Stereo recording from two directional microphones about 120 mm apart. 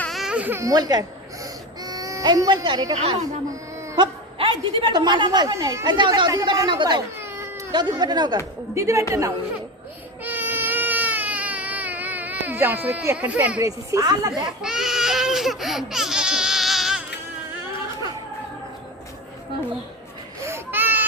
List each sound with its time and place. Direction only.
0.1 s baby cry: 5° right (ahead or behind)
0.6 s a woman's voice: 30° right (ahead or behind)
1.8 s baby cry: 30° right (ahead or behind)
3.9 s a woman's voice: 45° right (ahead or behind)
7.2 s cat: 20° right (ahead or behind)
7.7 s a woman's voice: 35° right (ahead or behind)
8.7 s a woman's voice: 25° right (ahead or behind)
10.2 s baby cry: 15° right (ahead or behind)
13.6 s a woman's voice: 30° right (ahead or behind)
14.6 s baby cry: 5° right (ahead or behind)
20.4 s a sound: 20° right (ahead or behind)